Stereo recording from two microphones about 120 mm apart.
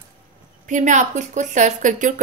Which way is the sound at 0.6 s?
90° right.